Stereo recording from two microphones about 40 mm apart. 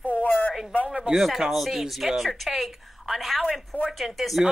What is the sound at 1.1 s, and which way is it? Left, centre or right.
A woman's voice, centre.